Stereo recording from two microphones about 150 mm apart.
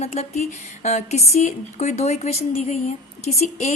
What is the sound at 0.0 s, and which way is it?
Speech, 45° left (ahead or behind).